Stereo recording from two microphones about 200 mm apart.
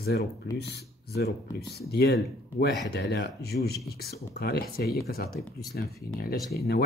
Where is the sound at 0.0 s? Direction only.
55° left (ahead or behind).